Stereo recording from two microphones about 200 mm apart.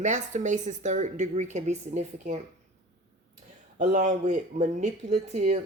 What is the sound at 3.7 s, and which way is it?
Speech, 35° right (ahead or behind).